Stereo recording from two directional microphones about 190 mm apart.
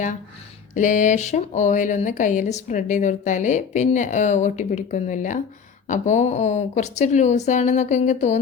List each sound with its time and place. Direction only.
0.7 s speech: 40° left (ahead or behind)